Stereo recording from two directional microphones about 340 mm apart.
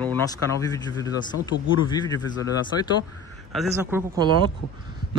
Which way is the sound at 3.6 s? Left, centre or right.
Centre.